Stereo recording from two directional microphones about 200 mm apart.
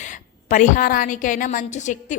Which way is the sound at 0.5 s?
40° left (ahead or behind).